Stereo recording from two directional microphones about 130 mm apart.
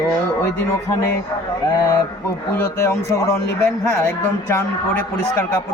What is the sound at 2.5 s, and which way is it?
A man's voice, 20° left (ahead or behind).